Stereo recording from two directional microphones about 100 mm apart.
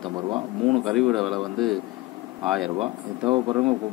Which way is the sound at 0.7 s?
Centre (ahead or behind).